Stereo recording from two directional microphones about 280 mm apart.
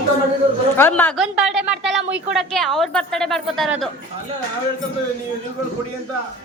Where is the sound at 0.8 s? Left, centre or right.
Centre.